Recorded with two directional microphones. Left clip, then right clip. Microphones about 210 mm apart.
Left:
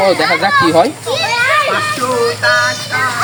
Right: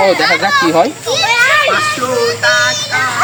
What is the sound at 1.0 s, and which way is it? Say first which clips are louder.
Children playing: right 3 dB; 55° right (ahead or behind).